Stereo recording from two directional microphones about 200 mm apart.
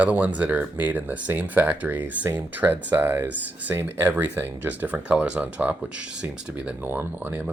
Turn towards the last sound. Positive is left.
turn(degrees=-10)  # may be behind; listen again after turning